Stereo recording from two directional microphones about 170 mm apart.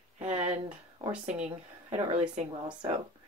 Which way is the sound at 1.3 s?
45° right (ahead or behind).